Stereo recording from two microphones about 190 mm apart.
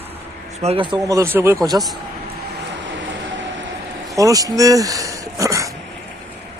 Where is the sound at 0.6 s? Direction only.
35° right (ahead or behind).